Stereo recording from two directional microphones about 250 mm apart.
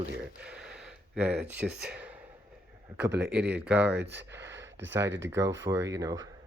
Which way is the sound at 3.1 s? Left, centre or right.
Right.